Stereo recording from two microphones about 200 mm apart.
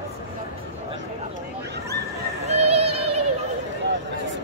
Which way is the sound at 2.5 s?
30° right (ahead or behind).